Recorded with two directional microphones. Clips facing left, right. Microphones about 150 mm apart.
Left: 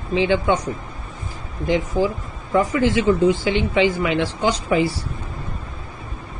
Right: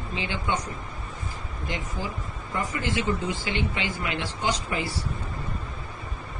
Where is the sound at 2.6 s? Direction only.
90° left.